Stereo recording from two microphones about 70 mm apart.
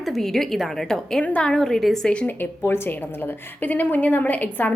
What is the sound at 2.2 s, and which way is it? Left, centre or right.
A woman's voice, left.